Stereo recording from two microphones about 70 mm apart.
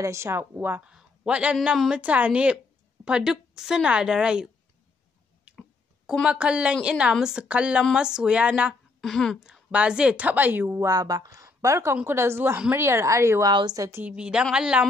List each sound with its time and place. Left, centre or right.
0.0 s a woman's voice: right
0.8 s a woman's voice: centre
5.5 s a sound: centre
6.2 s a woman's voice: centre
9.0 s speech: centre
9.4 s a woman's voice: centre
10.9 s speech: right
11.4 s a woman's voice: right
13.4 s a woman's voice: right
13.7 s a woman's voice: right
14.0 s a woman's voice: centre